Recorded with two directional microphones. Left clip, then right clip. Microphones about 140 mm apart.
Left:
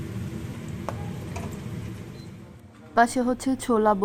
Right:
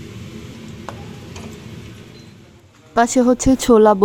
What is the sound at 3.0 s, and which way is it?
Speech, 30° right (ahead or behind).